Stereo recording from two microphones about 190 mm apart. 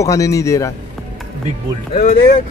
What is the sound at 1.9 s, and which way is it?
Speech, 45° left (ahead or behind).